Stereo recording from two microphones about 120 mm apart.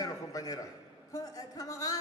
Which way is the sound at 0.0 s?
30° left (ahead or behind).